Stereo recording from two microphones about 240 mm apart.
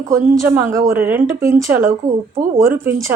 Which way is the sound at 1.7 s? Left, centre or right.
Right.